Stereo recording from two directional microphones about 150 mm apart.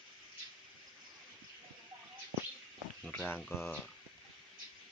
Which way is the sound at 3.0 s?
10° left (ahead or behind).